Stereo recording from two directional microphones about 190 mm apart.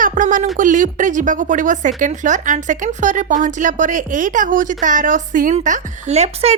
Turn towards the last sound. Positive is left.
turn(degrees=-35)  # may be behind; listen again after turning